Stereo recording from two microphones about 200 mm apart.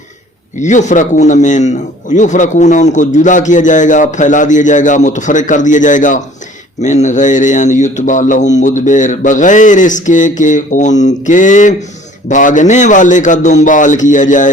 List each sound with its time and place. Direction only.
0.6 s a man's voice: 35° left (ahead or behind)